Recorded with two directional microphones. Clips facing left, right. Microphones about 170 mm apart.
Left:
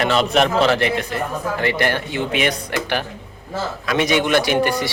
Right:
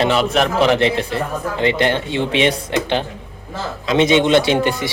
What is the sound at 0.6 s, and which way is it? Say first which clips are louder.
A man's voice: right 2 dB; 20° right (ahead or behind).